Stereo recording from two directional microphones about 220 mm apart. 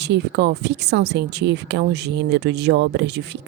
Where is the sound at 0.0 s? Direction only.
50° right (ahead or behind).